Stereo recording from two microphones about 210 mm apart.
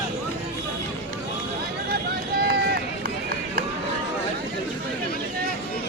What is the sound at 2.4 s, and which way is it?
Run, 50° right (ahead or behind).